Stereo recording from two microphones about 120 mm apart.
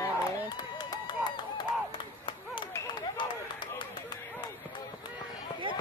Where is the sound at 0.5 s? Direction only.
35° left (ahead or behind).